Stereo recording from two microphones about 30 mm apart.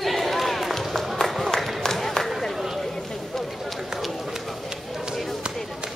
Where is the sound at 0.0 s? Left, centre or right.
Centre.